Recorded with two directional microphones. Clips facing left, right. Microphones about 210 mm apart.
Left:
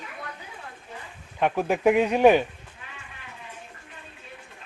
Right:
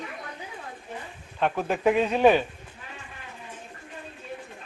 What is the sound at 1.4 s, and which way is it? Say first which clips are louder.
Speech: left 2 dB; 10° left (ahead or behind).